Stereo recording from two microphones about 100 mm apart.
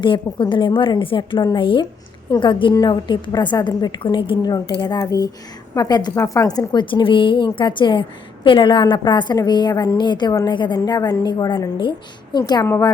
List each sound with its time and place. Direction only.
0.0 s a woman's voice: 55° left (ahead or behind)
2.7 s a woman's voice: 40° left (ahead or behind)
4.0 s a woman's voice: 55° left (ahead or behind)
4.5 s a child's voice: 40° left (ahead or behind)
6.1 s a woman's voice: 35° left (ahead or behind)